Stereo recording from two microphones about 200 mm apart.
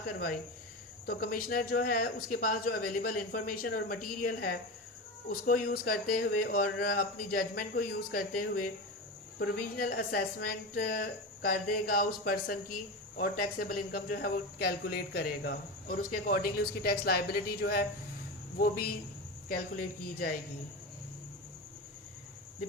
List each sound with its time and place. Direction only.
0.0 s speech: 50° left (ahead or behind)